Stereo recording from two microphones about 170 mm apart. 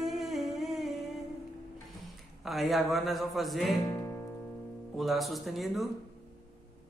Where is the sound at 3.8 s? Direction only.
20° left (ahead or behind).